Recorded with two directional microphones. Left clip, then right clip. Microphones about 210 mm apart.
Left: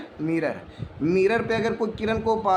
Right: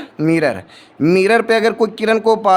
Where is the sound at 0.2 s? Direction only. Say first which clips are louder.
Right 11 dB; 55° right (ahead or behind).